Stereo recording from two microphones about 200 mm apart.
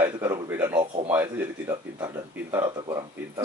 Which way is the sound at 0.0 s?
15° right (ahead or behind).